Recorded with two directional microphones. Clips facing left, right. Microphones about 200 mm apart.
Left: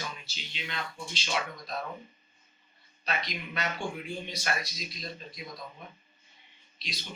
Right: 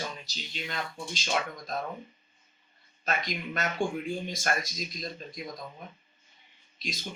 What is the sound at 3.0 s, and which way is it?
Speech, 45° right (ahead or behind).